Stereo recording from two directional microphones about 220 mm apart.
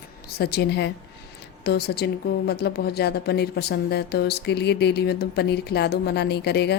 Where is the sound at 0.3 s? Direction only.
45° left (ahead or behind).